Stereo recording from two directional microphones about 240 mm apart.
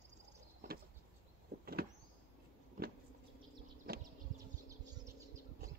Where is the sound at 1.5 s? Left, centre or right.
Right.